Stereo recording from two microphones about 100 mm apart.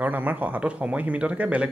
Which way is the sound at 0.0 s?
15° right (ahead or behind).